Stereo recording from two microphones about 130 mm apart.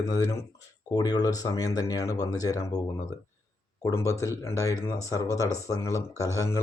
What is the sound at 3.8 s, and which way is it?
Speech, 25° left (ahead or behind).